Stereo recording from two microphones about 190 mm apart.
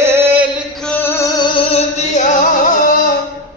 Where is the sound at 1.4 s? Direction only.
35° left (ahead or behind).